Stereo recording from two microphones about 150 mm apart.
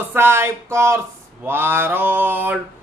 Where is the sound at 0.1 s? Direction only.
15° right (ahead or behind).